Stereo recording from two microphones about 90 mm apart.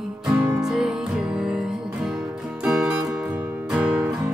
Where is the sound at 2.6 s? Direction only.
10° right (ahead or behind).